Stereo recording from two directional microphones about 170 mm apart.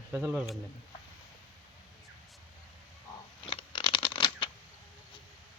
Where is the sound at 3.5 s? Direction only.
30° left (ahead or behind).